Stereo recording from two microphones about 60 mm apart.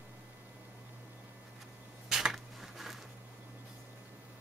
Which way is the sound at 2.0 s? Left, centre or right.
Centre.